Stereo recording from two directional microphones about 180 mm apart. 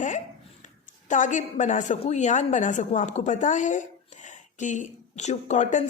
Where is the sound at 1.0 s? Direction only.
45° left (ahead or behind).